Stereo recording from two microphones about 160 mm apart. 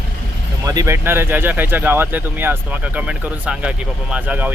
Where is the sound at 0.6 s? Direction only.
20° right (ahead or behind).